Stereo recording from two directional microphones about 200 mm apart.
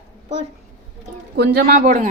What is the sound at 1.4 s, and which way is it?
Speech, 50° right (ahead or behind).